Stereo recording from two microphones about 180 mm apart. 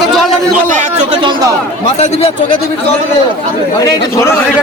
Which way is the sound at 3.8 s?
15° left (ahead or behind).